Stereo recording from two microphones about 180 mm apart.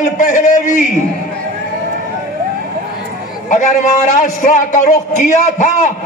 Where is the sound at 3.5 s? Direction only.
40° left (ahead or behind).